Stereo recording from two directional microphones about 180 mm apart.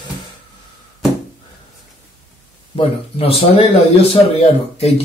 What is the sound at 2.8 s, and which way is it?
Speech, 30° left (ahead or behind).